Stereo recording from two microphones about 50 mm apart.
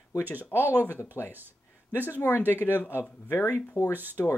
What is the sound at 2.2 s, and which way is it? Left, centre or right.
Speech, left.